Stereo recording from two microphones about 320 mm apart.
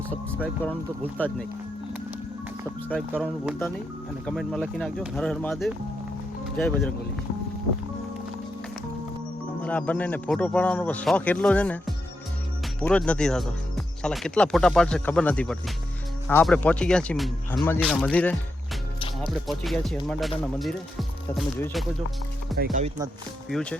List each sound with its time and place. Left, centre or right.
1.2 s speech: centre
2.9 s speech: centre
9.6 s speech: centre
22.5 s speech: right
23.5 s speech: centre